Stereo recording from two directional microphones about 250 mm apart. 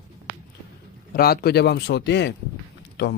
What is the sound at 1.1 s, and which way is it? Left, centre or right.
Speech, left.